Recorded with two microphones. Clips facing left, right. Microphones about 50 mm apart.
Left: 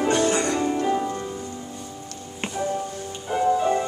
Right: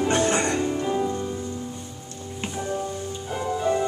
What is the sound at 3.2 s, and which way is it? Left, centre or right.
Music, centre.